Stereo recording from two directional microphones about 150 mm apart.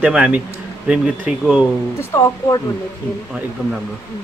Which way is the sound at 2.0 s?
20° left (ahead or behind).